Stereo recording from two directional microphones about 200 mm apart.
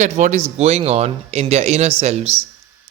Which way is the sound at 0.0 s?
35° right (ahead or behind).